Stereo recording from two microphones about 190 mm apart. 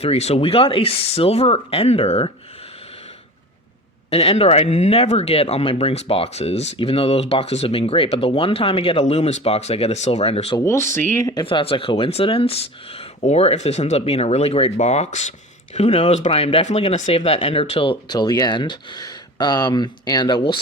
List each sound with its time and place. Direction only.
0.0 s speech: 35° left (ahead or behind)
4.1 s speech: 30° left (ahead or behind)
10.6 s speech: 15° left (ahead or behind)
10.9 s speech: 40° right (ahead or behind)
11.2 s speech: 15° left (ahead or behind)
11.4 s speech: 30° left (ahead or behind)